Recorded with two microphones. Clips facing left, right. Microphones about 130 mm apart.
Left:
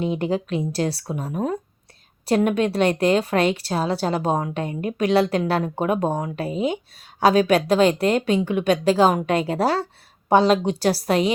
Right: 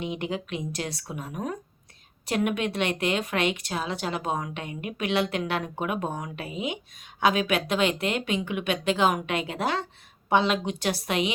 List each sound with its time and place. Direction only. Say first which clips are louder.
0.0 s speech: left 8 dB; 35° left (ahead or behind)